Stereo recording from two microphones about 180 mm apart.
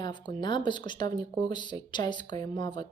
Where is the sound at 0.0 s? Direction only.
25° left (ahead or behind).